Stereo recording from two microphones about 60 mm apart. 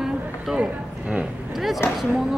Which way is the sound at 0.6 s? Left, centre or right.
Centre.